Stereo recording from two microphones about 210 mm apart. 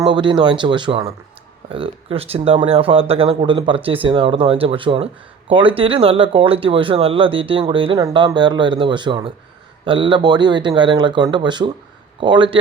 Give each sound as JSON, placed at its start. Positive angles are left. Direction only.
{"t": 0.1, "sound": "speech", "side_deg": -25}